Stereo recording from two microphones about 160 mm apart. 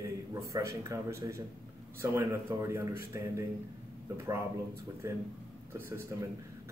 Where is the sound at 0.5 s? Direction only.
20° right (ahead or behind).